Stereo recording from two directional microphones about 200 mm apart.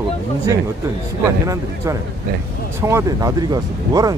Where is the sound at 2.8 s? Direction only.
15° right (ahead or behind).